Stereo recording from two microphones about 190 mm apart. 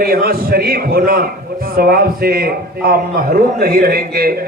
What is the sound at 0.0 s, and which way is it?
A man's voice, 50° right (ahead or behind).